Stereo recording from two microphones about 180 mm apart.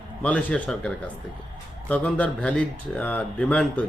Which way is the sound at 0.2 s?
5° left (ahead or behind).